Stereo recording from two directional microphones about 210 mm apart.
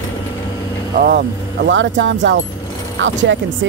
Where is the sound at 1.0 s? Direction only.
50° right (ahead or behind).